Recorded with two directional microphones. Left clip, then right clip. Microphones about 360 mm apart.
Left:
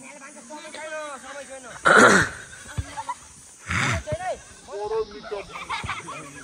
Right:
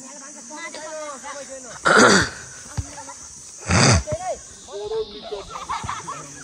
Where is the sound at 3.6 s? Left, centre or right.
Centre.